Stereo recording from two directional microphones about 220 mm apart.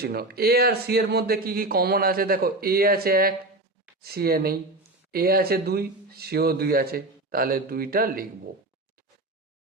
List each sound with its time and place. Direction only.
0.0 s speech: 45° right (ahead or behind)